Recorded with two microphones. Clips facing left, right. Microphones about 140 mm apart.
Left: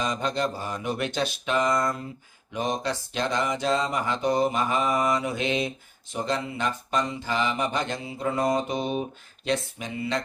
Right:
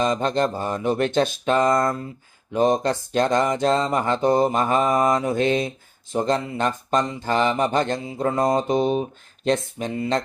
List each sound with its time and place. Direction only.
0.0 s mantra: 45° right (ahead or behind)
9.4 s speech: 40° right (ahead or behind)